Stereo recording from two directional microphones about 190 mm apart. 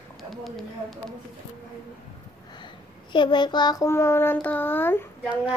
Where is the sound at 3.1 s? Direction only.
25° left (ahead or behind).